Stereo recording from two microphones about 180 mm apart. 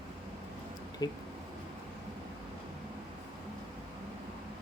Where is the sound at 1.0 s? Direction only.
20° left (ahead or behind).